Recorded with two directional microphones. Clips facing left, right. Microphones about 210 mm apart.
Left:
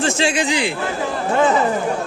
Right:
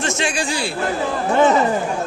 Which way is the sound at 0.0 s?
30° left (ahead or behind).